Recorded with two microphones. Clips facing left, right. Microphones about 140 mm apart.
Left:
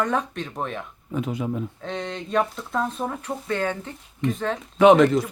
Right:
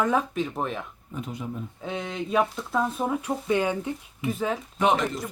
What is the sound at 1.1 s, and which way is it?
Speech, 90° left.